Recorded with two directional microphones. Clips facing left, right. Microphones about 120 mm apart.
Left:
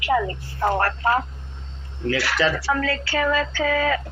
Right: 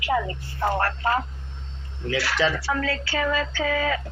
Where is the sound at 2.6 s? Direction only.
70° left (ahead or behind).